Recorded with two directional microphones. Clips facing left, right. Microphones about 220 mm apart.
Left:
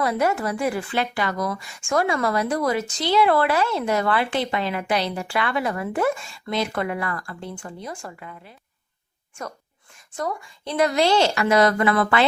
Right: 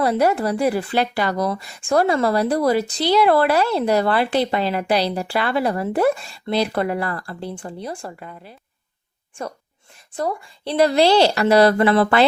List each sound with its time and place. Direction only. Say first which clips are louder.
0.0 s speech: right 4 dB; 35° right (ahead or behind)
10.2 s speech: right 4 dB; 30° right (ahead or behind)